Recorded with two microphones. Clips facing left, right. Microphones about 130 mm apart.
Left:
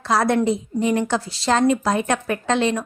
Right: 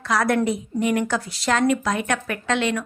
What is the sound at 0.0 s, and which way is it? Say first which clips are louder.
A woman's voice: left 2 dB; 30° left (ahead or behind).